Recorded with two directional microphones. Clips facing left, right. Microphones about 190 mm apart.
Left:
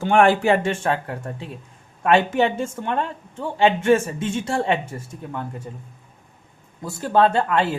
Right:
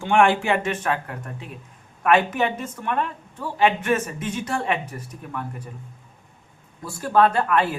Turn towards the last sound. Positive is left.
turn(degrees=25)  # may be behind; listen again after turning